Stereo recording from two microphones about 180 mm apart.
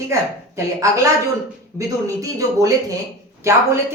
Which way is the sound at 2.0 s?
20° right (ahead or behind).